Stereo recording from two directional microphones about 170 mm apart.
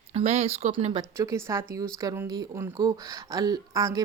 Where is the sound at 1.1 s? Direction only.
20° right (ahead or behind).